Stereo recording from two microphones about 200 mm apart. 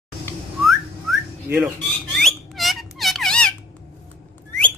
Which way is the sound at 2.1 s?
Centre (ahead or behind).